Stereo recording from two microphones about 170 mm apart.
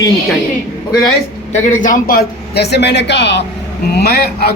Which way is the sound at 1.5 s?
45° left (ahead or behind).